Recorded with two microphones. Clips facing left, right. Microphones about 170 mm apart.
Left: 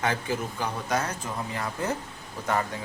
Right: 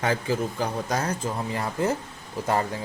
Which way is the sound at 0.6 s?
35° right (ahead or behind).